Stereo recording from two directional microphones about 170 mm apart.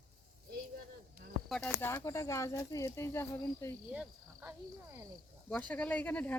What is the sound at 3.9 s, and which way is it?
Cricket, 10° right (ahead or behind).